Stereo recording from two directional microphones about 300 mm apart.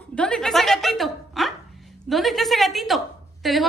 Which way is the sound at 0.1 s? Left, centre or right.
Centre.